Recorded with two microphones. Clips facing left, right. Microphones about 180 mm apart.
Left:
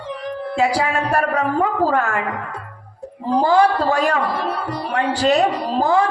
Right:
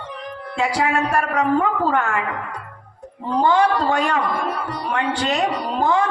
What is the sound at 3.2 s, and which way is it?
A woman's voice, 35° left (ahead or behind).